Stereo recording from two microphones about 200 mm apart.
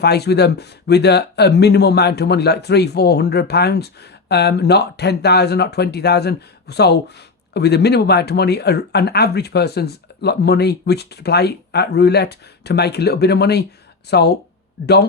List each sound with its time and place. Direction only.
0.0 s speech: 55° left (ahead or behind)